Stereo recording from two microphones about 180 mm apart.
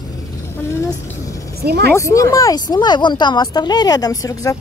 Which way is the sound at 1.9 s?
15° left (ahead or behind).